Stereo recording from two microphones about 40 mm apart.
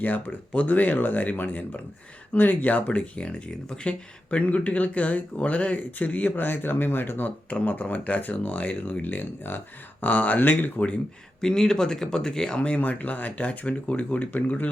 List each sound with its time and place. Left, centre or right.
0.5 s speech: left
7.6 s speech: left
10.0 s speech: left
11.3 s speech: centre
12.6 s speech: left